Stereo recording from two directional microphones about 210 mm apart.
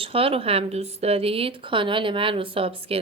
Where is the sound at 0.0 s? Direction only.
25° right (ahead or behind).